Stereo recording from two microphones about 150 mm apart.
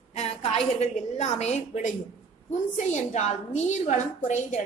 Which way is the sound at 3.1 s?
50° left (ahead or behind).